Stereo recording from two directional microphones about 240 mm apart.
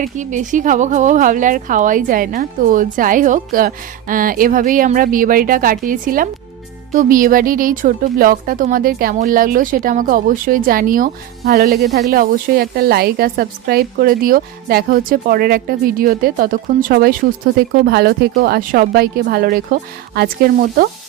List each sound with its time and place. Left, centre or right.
0.0 s a woman's voice: right